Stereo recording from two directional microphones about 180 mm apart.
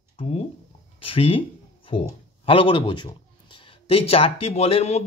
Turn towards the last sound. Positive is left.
turn(degrees=35)  # may be behind; listen again after turning